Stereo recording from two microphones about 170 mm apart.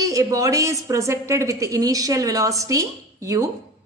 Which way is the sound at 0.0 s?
20° right (ahead or behind).